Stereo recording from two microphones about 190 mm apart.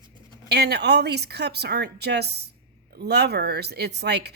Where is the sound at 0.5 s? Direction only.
60° right (ahead or behind).